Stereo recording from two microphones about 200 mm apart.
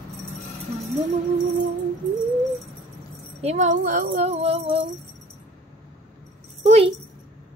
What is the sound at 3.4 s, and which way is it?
Speech, 35° right (ahead or behind).